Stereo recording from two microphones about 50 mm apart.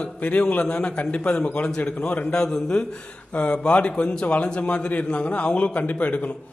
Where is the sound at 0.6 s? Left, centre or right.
Centre.